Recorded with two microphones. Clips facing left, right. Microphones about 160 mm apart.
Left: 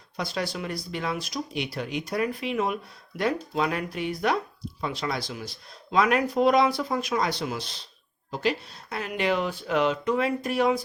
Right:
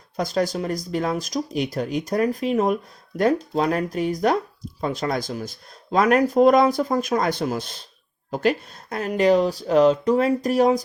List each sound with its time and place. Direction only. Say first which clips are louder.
0.2 s speech: right 7 dB; 45° right (ahead or behind)